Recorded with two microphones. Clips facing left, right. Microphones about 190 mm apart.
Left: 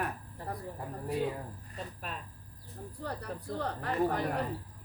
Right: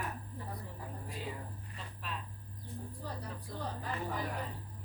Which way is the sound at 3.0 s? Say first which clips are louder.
Left 9 dB; 70° left (ahead or behind).